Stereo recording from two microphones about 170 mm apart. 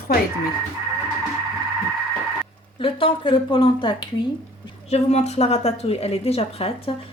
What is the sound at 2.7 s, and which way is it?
A woman's voice, 30° left (ahead or behind).